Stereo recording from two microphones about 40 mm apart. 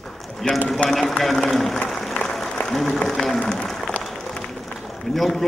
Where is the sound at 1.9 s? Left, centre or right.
Centre.